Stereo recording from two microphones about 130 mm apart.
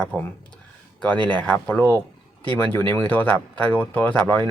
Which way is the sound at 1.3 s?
10° left (ahead or behind).